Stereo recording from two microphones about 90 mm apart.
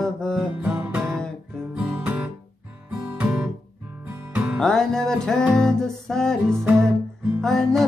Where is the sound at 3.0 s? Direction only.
20° right (ahead or behind).